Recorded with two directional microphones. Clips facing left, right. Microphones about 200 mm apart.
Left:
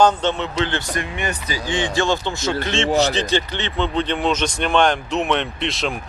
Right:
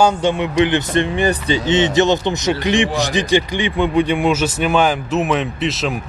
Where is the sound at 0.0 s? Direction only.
10° right (ahead or behind); by 1.6 s 35° right (ahead or behind).